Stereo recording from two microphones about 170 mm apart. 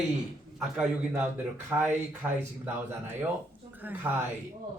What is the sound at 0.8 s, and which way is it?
Speech, 10° right (ahead or behind).